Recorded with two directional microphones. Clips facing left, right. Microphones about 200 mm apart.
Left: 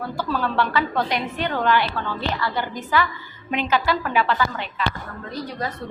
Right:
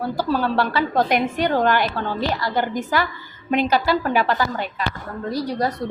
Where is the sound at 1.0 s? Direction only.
50° right (ahead or behind).